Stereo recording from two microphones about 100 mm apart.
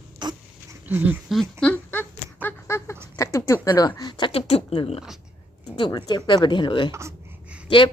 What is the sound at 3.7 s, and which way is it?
Speech, 40° left (ahead or behind).